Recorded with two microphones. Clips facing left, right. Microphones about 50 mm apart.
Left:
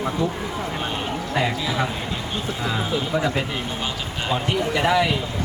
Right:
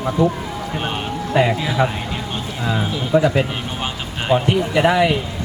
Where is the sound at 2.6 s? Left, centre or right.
Centre.